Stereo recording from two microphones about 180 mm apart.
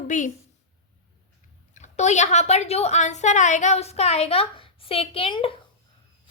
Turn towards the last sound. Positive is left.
turn(degrees=30)  # may be behind; listen again after turning